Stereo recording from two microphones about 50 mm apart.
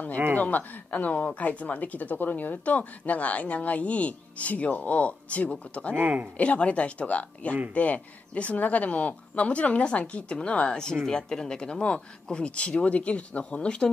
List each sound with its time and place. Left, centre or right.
0.4 s speech: left
5.9 s speech: right
6.3 s speech: left